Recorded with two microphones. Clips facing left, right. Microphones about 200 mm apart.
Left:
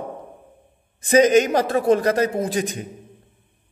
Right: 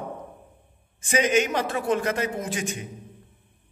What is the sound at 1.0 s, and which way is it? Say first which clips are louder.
A man's voice: left 8 dB; 40° left (ahead or behind).